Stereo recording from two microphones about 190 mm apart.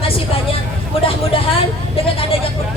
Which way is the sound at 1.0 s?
30° left (ahead or behind).